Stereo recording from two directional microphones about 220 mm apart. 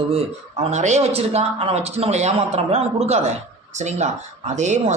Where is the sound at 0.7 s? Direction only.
30° right (ahead or behind).